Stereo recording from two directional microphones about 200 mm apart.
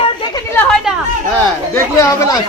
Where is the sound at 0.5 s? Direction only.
Centre (ahead or behind).